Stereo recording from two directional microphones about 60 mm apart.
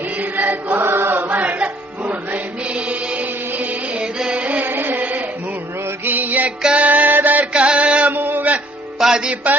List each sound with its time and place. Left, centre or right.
0.3 s chant: right
1.3 s music: right
4.2 s music: centre
4.6 s a sound: right
6.1 s music: right
6.6 s music: centre
6.8 s music: right
7.5 s music: centre
8.1 s music: right
9.0 s music: centre